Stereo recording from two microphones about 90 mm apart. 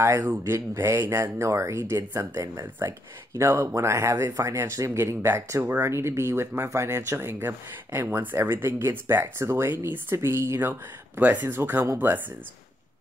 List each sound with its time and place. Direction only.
0.0 s speech: 30° right (ahead or behind)